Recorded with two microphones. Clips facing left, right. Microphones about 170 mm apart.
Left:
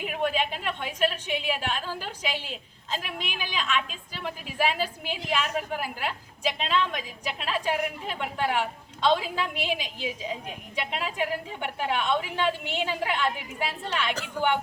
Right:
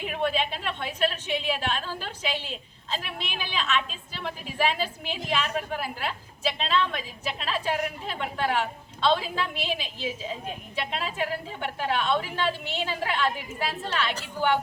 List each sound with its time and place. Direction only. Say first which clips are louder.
0.0 s a woman's voice: even; 10° left (ahead or behind)
14.4 s a woman's voice: even; 55° left (ahead or behind)